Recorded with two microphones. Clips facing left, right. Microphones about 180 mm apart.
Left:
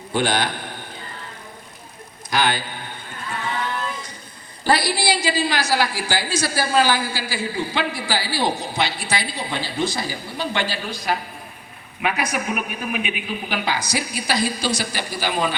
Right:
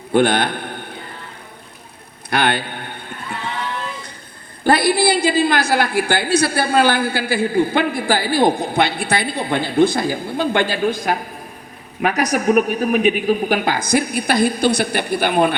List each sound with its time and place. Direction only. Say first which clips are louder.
0.1 s a man's voice: right 6 dB; 55° right (ahead or behind)
2.3 s a sound: right 3 dB; 60° right (ahead or behind)
4.6 s a woman's voice: right 5 dB; 55° right (ahead or behind)